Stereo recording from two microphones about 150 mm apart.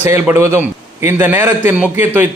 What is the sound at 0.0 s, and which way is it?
A man's voice, 15° right (ahead or behind).